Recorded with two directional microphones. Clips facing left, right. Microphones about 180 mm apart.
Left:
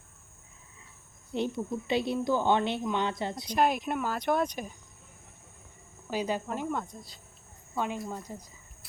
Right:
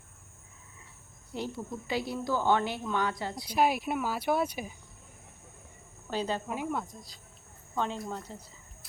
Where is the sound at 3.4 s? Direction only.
5° right (ahead or behind).